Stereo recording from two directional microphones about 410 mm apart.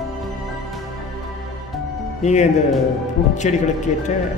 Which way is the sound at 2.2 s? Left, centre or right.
Centre.